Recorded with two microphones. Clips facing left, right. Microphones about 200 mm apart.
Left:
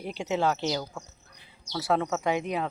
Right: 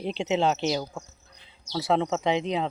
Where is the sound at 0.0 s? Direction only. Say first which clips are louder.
Right 3 dB; 20° right (ahead or behind).